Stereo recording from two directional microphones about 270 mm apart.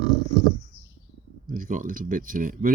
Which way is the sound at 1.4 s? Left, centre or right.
Right.